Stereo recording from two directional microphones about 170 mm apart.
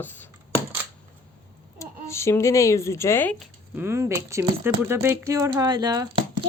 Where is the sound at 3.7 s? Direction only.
15° right (ahead or behind).